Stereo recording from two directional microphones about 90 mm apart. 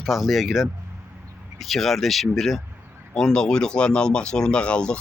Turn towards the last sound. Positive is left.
turn(degrees=10)  # may be behind; listen again after turning